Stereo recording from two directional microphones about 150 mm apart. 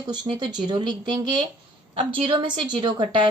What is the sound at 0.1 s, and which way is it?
A woman's voice, 30° right (ahead or behind).